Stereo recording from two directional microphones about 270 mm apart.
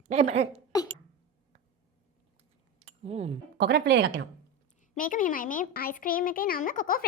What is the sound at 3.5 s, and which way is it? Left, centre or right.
Speech, right.